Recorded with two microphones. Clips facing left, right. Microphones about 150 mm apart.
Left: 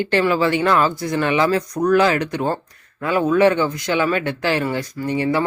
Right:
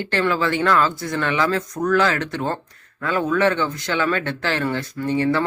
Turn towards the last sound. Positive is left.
turn(degrees=15)  # may be behind; listen again after turning